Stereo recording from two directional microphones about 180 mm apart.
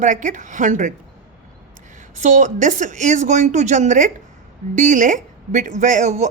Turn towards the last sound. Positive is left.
turn(degrees=-40)  # may be behind; listen again after turning